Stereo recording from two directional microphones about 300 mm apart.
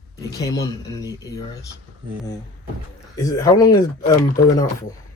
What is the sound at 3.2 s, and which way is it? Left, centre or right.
Speech, centre.